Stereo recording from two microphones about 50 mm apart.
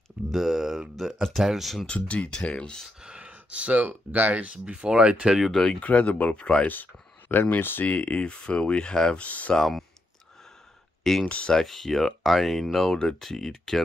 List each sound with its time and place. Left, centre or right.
0.3 s speech: centre
1.9 s speech: left
3.2 s speech: right
4.5 s speech: centre
5.5 s speech: centre
5.8 s speech: left
6.7 s speech: left
7.8 s speech: left
9.6 s speech: centre
11.2 s speech: left
11.5 s speech: centre